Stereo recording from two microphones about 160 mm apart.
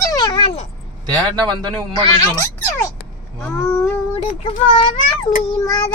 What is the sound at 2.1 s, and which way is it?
Speech, 20° left (ahead or behind).